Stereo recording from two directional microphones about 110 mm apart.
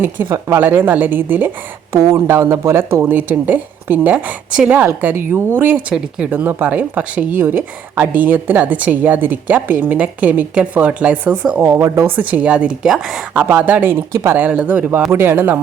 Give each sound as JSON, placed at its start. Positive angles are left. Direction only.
{"t": 0.4, "sound": "speech", "side_deg": -20}
{"t": 1.9, "sound": "speech", "side_deg": -30}